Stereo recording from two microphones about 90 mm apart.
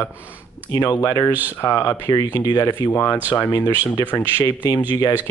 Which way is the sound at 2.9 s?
25° left (ahead or behind).